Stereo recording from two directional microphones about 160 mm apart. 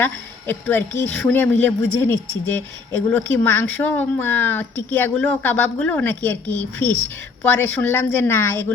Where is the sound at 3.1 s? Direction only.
10° left (ahead or behind).